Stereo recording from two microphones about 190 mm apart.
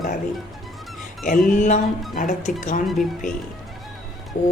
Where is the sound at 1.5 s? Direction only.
40° left (ahead or behind).